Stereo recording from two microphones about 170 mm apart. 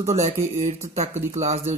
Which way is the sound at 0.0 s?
40° right (ahead or behind).